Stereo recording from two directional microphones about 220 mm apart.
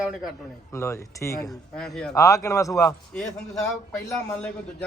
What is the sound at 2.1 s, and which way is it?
A man's voice, 15° left (ahead or behind).